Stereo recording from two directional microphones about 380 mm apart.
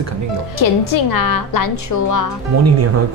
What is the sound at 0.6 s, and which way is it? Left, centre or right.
A woman's voice, left.